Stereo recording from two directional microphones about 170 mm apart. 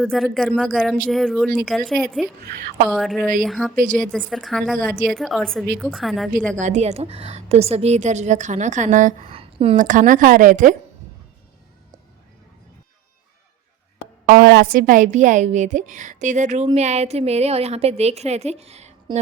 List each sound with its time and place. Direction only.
0.0 s speech: centre (ahead or behind)
2.5 s a woman's voice: 60° right (ahead or behind)
2.9 s speech: centre (ahead or behind)
6.6 s a woman's voice: 45° right (ahead or behind)
9.2 s a sound: 35° right (ahead or behind)
9.7 s a woman's voice: 50° right (ahead or behind)
14.3 s a woman's voice: 60° right (ahead or behind); by 18.9 s 40° right (ahead or behind)